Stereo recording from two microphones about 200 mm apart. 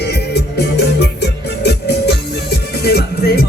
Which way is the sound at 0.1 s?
55° left (ahead or behind).